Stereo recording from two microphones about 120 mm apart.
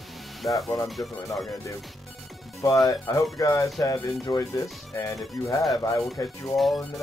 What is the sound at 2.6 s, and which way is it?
Speech, 30° left (ahead or behind).